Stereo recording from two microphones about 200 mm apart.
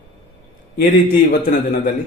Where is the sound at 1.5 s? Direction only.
50° left (ahead or behind).